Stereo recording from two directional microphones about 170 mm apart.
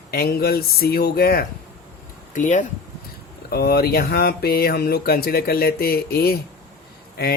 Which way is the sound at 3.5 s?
65° left (ahead or behind).